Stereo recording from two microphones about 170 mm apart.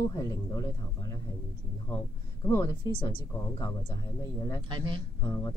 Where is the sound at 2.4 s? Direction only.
20° left (ahead or behind).